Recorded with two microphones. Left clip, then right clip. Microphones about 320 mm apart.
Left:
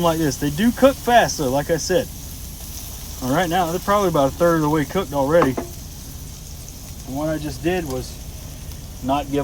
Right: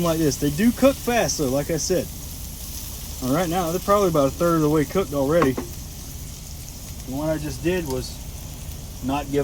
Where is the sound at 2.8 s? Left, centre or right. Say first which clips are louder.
Left 2 dB; centre.